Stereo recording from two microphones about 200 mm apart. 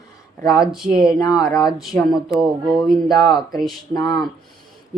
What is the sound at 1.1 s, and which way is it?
Speech, 15° left (ahead or behind).